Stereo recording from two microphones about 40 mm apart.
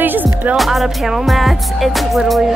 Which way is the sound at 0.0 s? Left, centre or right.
Right.